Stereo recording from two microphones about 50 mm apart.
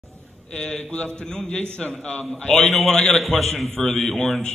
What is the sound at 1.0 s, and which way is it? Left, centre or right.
A man's voice, centre.